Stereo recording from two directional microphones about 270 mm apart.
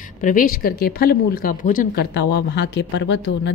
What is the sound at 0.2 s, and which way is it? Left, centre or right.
A woman's voice, left.